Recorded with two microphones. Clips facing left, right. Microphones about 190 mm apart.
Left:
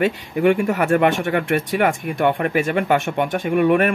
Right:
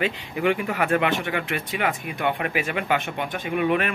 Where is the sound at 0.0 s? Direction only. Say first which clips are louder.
Left 6 dB; 45° left (ahead or behind).